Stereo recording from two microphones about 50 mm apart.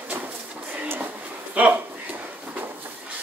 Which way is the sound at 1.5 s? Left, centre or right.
Right.